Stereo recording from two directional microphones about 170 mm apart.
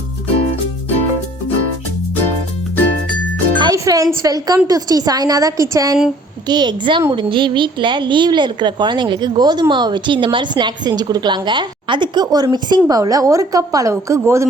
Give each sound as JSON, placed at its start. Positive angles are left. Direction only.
{"t": 3.6, "sound": "a woman's voice", "side_deg": -20}